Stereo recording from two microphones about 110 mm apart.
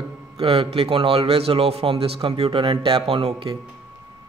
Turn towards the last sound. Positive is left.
turn(degrees=-55)  # may be behind; listen again after turning